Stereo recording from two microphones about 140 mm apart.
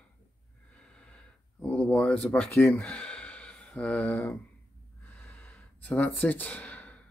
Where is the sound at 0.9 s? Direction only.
5° left (ahead or behind).